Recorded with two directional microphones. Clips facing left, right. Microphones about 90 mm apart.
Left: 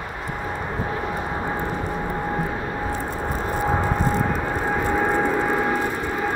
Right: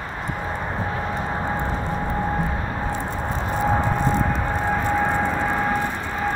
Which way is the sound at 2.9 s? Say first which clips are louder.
Even; 20° right (ahead or behind).